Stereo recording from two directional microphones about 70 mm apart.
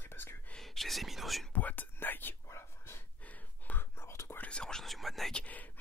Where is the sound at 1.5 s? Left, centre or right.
Left.